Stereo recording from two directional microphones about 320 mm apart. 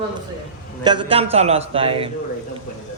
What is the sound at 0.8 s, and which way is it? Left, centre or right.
A man's voice, centre.